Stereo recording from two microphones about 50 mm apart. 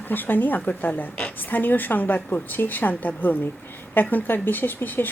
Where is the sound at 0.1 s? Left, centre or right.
Left.